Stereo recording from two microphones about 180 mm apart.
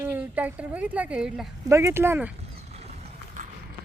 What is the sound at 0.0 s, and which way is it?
Speech, 10° right (ahead or behind).